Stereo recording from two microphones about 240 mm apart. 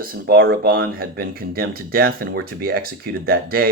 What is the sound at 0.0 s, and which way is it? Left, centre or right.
Speech, right.